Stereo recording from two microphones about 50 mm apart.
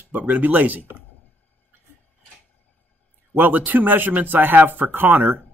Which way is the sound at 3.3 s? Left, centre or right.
Right.